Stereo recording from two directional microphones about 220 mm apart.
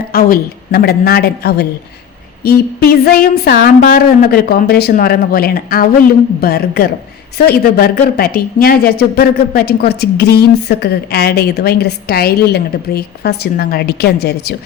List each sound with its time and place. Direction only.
0.1 s a woman's voice: 45° left (ahead or behind)